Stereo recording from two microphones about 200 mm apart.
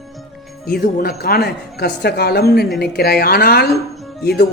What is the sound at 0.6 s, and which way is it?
Speech, 50° left (ahead or behind).